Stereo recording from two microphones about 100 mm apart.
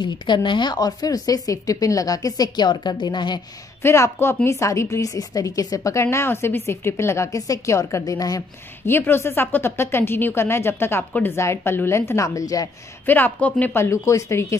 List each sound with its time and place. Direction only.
0.0 s speech: 55° left (ahead or behind)
3.8 s a woman's voice: 25° left (ahead or behind)
8.8 s a woman's voice: 20° left (ahead or behind)
13.0 s a woman's voice: 20° left (ahead or behind)
13.8 s a woman's voice: 30° left (ahead or behind)